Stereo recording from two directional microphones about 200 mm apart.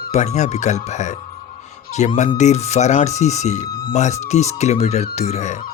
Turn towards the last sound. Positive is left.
turn(degrees=35)  # may be behind; listen again after turning